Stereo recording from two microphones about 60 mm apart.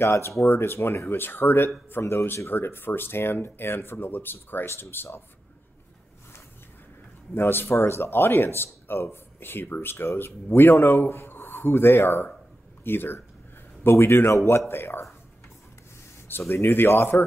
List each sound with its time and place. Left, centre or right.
0.0 s a man's voice: left
7.3 s a man's voice: left
14.7 s speech: left
16.3 s speech: left